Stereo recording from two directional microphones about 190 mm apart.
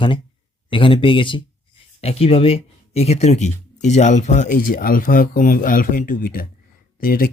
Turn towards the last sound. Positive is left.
turn(degrees=50)  # may be behind; listen again after turning